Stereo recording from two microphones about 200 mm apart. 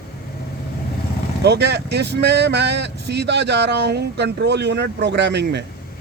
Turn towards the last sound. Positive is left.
turn(degrees=-60)  # may be behind; listen again after turning